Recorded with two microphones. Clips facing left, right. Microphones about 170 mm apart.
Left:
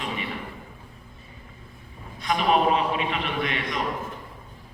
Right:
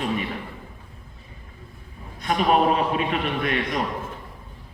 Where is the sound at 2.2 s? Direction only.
40° right (ahead or behind).